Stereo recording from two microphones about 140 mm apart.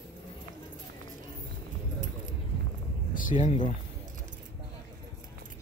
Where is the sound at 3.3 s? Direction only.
45° left (ahead or behind).